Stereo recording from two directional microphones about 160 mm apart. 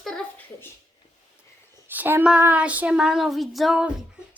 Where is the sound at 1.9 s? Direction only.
10° right (ahead or behind).